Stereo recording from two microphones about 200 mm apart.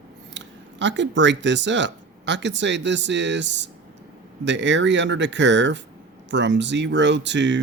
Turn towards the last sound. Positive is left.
turn(degrees=-60)  # may be behind; listen again after turning